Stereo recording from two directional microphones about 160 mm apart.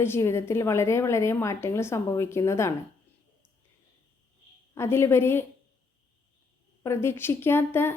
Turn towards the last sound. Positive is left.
turn(degrees=15)  # may be behind; listen again after turning